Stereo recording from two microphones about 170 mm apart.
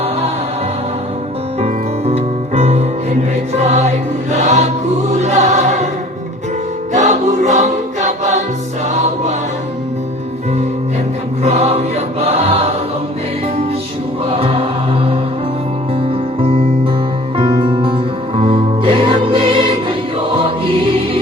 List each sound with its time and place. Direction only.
1.5 s music: 40° right (ahead or behind)
6.9 s choir: 45° right (ahead or behind)
11.4 s choir: 40° right (ahead or behind)
16.0 s music: 30° right (ahead or behind)